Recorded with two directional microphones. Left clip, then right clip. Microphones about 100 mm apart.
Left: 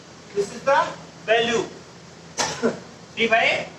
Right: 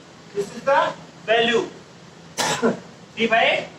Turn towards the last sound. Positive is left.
turn(degrees=-30)  # may be behind; listen again after turning